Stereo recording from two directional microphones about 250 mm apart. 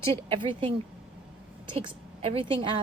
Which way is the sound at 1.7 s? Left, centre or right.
Right.